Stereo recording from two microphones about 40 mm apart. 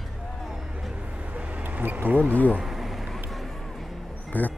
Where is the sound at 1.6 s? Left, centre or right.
Right.